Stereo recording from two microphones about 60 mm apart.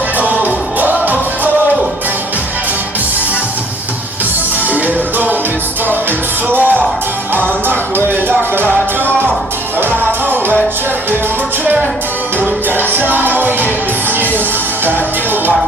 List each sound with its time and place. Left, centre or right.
0.4 s music: right
4.7 s music: right
6.5 s music: right
9.8 s music: right
11.6 s music: right